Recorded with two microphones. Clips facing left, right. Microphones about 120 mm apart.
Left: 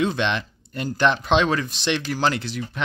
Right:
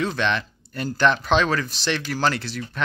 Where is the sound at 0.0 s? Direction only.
20° left (ahead or behind).